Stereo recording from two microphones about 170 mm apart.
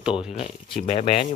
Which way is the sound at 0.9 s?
35° left (ahead or behind).